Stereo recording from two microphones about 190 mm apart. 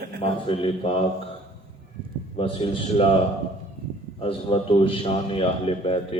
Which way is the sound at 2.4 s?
30° left (ahead or behind).